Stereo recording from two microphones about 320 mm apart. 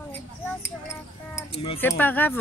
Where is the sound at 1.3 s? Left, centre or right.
Centre.